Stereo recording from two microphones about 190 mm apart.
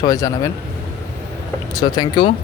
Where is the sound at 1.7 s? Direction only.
20° left (ahead or behind).